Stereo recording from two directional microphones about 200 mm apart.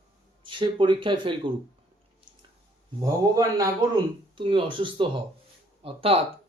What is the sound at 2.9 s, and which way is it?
A man's voice, 15° right (ahead or behind).